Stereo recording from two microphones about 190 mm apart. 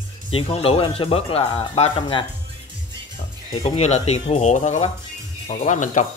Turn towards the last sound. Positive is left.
turn(degrees=40)  # may be behind; listen again after turning